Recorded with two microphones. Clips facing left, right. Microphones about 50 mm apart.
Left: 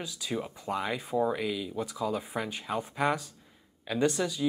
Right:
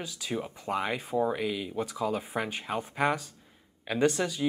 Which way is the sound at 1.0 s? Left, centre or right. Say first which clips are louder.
Even; centre.